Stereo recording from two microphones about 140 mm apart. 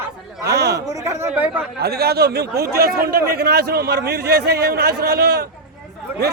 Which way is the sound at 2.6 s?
90° right.